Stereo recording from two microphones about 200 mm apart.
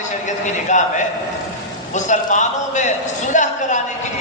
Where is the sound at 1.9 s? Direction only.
35° left (ahead or behind).